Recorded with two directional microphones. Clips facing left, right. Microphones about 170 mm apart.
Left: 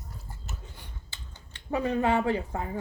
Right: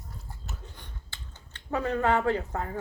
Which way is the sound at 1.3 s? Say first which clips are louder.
Left 1 dB; 15° left (ahead or behind).